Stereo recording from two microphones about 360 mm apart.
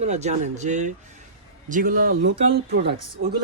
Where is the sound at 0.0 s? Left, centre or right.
Centre.